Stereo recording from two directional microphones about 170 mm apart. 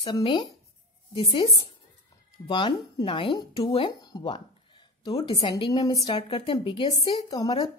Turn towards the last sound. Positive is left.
turn(degrees=25)  # may be behind; listen again after turning